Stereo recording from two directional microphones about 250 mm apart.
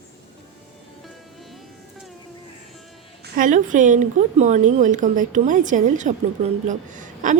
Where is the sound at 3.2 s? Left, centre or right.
Right.